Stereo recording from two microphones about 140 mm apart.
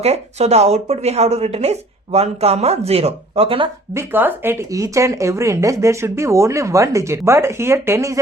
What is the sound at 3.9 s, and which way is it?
Speech, 15° right (ahead or behind).